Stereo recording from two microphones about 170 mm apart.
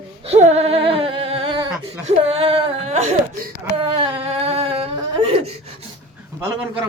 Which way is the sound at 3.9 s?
35° right (ahead or behind).